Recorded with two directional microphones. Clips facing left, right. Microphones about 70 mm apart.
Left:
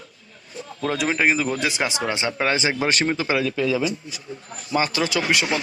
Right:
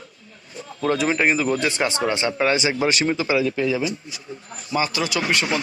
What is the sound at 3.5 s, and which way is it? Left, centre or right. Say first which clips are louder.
Speech: even; centre.